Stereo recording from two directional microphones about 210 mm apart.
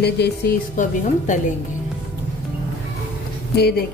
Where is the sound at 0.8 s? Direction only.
35° left (ahead or behind).